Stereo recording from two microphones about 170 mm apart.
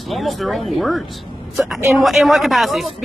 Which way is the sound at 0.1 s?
Centre (ahead or behind).